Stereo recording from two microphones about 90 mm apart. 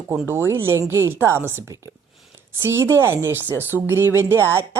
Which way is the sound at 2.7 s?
30° right (ahead or behind).